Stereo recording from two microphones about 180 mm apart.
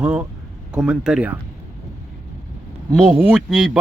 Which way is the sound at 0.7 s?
5° right (ahead or behind).